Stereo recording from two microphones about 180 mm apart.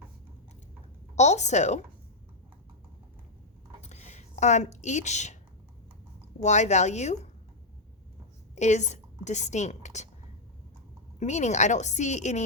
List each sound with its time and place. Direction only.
1.1 s speech: 40° left (ahead or behind)
3.8 s a sound: 40° left (ahead or behind)
6.4 s speech: 40° left (ahead or behind)
8.5 s a woman's voice: 40° left (ahead or behind)
11.2 s speech: 40° left (ahead or behind)